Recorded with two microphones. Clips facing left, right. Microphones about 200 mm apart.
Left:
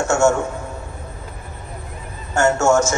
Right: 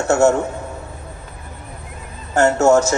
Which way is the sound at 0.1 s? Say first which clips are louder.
Right 3 dB; 35° right (ahead or behind).